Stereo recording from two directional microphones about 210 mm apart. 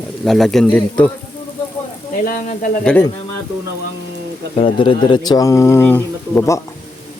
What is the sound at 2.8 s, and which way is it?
Speech, 5° left (ahead or behind).